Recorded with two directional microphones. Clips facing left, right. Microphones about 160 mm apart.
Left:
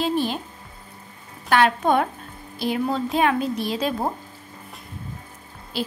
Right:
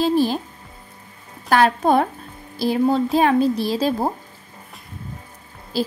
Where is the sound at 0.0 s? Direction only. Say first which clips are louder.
Right 5 dB; 35° right (ahead or behind).